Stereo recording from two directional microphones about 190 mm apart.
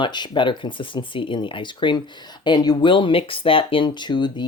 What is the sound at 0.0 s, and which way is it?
Speech, 25° left (ahead or behind).